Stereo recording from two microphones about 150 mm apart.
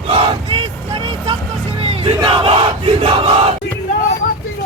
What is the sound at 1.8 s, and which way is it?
Crowd, 40° right (ahead or behind).